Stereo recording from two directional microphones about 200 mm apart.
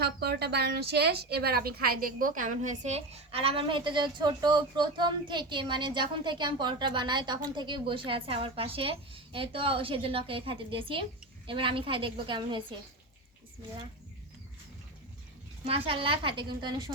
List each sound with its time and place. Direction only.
0.0 s a woman's voice: 55° right (ahead or behind); by 12.6 s 25° right (ahead or behind)
15.6 s a woman's voice: 30° right (ahead or behind)